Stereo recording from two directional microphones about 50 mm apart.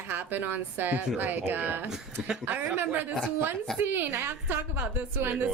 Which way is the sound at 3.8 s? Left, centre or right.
Right.